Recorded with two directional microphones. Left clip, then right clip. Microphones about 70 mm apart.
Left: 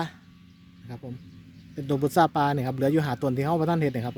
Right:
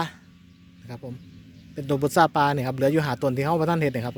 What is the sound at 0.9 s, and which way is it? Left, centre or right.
Speech, left.